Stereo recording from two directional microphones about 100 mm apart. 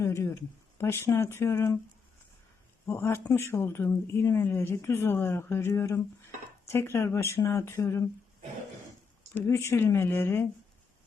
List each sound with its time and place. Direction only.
0.0 s speech: 30° left (ahead or behind)
2.9 s speech: 20° left (ahead or behind)
9.3 s speech: 25° left (ahead or behind)